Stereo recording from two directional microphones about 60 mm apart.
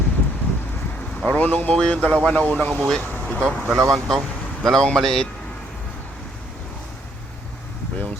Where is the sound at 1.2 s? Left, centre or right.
Left.